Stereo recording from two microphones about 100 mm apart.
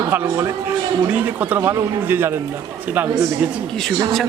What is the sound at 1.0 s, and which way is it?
A man's voice, 15° right (ahead or behind).